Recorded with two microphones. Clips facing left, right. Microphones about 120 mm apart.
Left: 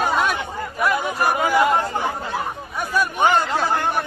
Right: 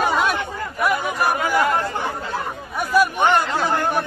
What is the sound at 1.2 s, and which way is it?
Chatter, 10° left (ahead or behind).